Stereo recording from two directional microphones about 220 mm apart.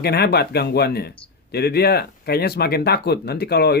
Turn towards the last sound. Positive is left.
turn(degrees=45)  # may be behind; listen again after turning